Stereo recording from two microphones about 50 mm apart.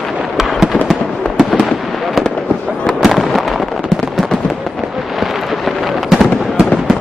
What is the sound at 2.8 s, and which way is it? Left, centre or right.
Fireworks, centre.